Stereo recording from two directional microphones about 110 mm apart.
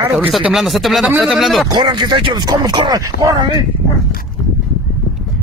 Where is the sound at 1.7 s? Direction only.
45° right (ahead or behind).